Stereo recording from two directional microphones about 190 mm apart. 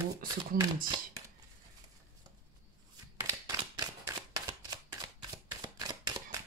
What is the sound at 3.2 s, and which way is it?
Shuffling cards, 20° right (ahead or behind).